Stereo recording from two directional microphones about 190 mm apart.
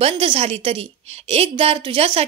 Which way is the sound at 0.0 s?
30° right (ahead or behind).